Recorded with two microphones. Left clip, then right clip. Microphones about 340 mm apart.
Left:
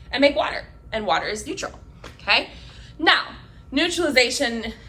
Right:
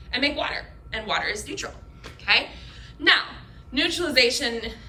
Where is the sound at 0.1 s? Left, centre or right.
Centre.